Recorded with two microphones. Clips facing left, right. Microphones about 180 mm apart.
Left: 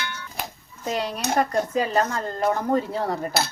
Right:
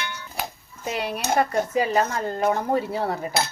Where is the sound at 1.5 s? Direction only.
15° right (ahead or behind).